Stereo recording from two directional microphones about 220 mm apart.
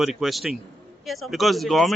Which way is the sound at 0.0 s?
Centre (ahead or behind).